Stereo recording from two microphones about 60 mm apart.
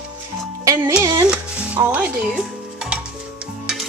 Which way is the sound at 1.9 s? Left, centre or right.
Right.